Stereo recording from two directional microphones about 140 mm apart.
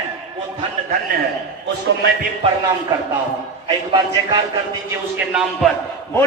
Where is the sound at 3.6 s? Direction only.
35° right (ahead or behind).